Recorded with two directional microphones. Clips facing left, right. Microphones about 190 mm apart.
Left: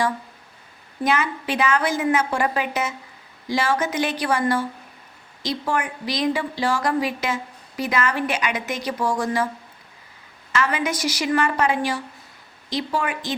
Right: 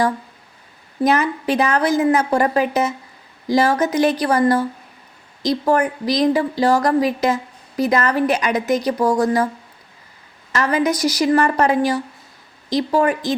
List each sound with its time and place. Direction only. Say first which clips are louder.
1.0 s a woman's voice: right 5 dB; 40° right (ahead or behind)
10.5 s a woman's voice: right 5 dB; 40° right (ahead or behind)